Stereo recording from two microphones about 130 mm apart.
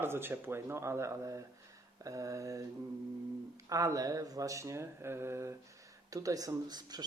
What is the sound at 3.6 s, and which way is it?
Speech, 25° right (ahead or behind).